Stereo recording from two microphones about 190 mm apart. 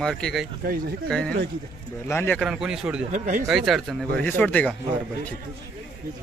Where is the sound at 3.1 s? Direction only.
40° right (ahead or behind).